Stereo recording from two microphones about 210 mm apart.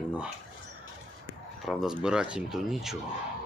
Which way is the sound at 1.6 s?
5° right (ahead or behind).